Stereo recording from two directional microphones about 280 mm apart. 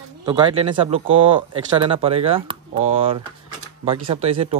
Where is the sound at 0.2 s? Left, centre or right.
Centre.